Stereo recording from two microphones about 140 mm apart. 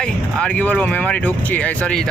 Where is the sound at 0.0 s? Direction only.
10° left (ahead or behind).